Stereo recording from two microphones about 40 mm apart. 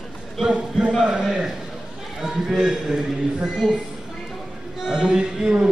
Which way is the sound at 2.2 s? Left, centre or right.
Centre.